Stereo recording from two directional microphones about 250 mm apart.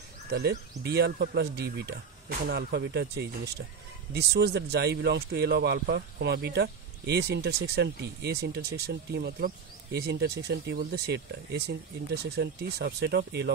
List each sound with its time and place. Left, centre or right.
0.3 s speech: right